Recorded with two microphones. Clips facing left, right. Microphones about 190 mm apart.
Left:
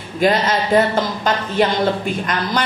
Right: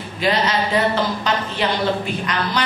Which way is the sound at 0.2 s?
50° left (ahead or behind).